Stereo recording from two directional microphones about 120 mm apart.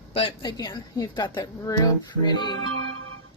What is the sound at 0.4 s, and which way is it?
A woman's voice, 35° left (ahead or behind).